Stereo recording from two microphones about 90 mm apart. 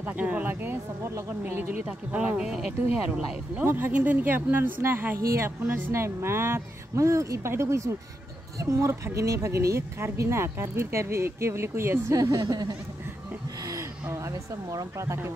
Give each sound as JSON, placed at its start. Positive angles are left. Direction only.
{"t": 0.0, "sound": "speech", "side_deg": -20}
{"t": 3.5, "sound": "speech", "side_deg": -20}
{"t": 12.2, "sound": "speech", "side_deg": -45}
{"t": 14.1, "sound": "speech", "side_deg": -35}